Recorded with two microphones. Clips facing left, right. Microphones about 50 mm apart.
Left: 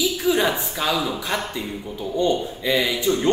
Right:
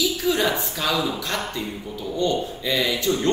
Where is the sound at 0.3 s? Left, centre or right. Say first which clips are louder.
Left 3 dB; centre.